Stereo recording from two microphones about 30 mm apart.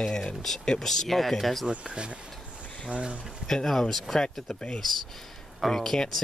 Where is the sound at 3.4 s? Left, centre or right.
Left.